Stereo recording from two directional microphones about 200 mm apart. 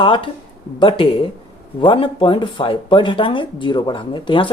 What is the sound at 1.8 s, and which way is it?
Speech, 25° left (ahead or behind).